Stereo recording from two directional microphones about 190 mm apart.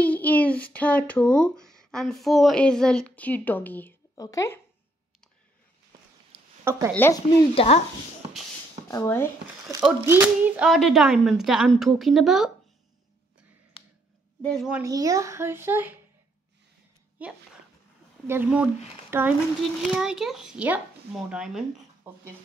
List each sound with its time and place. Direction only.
0.0 s speech: 10° left (ahead or behind)
6.6 s a woman's voice: 15° right (ahead or behind)
6.9 s speech: 10° left (ahead or behind)
7.5 s speech: 35° left (ahead or behind)
8.8 s speech: 15° left (ahead or behind)
10.0 s speech: 10° right (ahead or behind)
14.4 s speech: centre (ahead or behind)
14.8 s speech: 20° right (ahead or behind)
17.2 s a sound: 5° right (ahead or behind)
18.2 s speech: 10° right (ahead or behind)